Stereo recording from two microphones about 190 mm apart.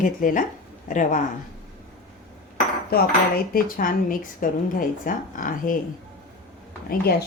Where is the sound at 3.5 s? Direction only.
45° left (ahead or behind).